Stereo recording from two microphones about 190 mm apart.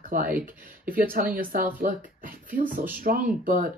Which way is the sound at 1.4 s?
45° right (ahead or behind).